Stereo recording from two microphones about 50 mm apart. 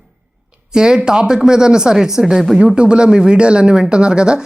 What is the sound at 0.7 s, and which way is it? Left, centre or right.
Speech, centre.